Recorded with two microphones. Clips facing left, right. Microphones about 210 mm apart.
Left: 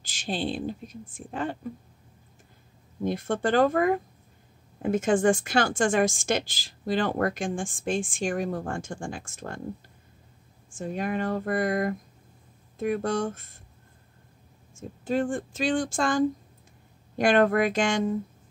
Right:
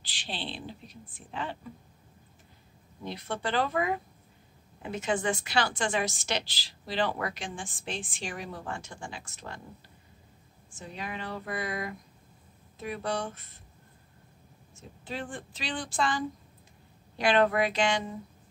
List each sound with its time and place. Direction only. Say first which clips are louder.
0.0 s a woman's voice: left 9 dB; 45° left (ahead or behind)
3.0 s a woman's voice: left 8 dB; 50° left (ahead or behind)
10.8 s a woman's voice: left 10 dB; 50° left (ahead or behind)
14.8 s a woman's voice: left 11 dB; 45° left (ahead or behind)